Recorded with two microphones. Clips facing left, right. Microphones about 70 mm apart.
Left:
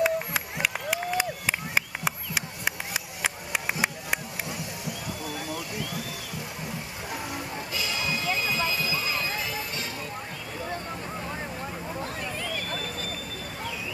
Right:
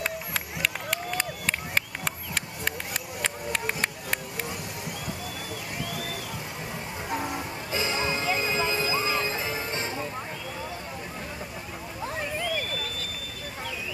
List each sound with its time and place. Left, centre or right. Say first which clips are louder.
0.0 s run: left 6 dB; centre
5.9 s a sound: right 1 dB; right
7.7 s music: right 4 dB; right